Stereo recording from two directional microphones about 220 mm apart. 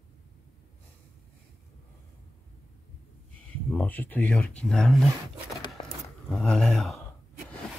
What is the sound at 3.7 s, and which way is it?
Speech, 5° left (ahead or behind).